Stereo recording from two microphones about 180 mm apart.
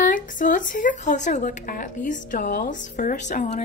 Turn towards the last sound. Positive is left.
turn(degrees=40)  # may be behind; listen again after turning